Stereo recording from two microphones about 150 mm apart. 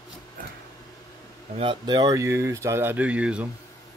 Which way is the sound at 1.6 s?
30° right (ahead or behind).